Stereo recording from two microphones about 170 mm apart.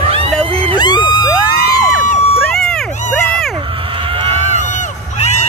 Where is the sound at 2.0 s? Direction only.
45° left (ahead or behind).